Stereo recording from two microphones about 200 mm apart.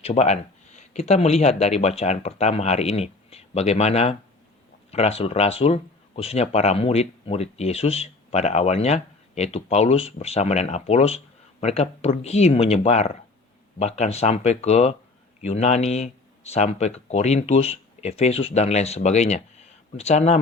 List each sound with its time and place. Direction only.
0.0 s speech: 30° left (ahead or behind)